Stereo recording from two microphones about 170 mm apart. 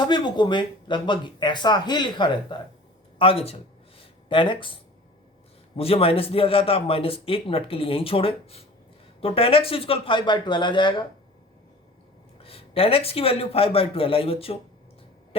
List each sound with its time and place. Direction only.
0.0 s speech: 25° left (ahead or behind)
3.2 s a sound: 35° left (ahead or behind)
5.7 s a man's voice: 35° left (ahead or behind)
12.4 s a man's voice: 35° left (ahead or behind)